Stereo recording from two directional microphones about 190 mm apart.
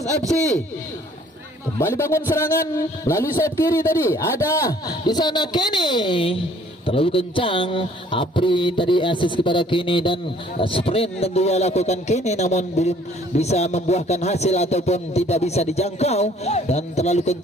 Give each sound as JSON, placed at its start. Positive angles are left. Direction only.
{"t": 1.8, "sound": "a man's voice", "side_deg": 15}
{"t": 10.6, "sound": "music", "side_deg": 30}